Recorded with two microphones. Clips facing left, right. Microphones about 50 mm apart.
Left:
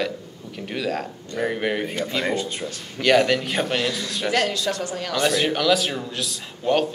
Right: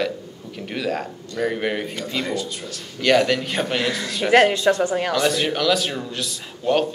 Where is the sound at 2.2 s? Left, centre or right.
Left.